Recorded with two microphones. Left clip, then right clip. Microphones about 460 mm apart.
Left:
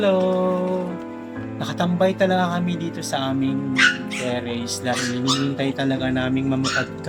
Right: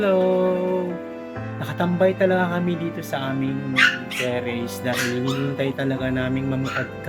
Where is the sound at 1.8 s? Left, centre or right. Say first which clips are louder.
Even; centre.